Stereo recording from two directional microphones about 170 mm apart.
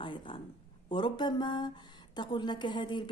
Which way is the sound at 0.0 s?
30° left (ahead or behind).